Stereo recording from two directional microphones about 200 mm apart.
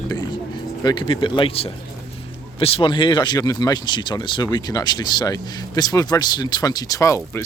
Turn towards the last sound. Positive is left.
turn(degrees=15)  # may be behind; listen again after turning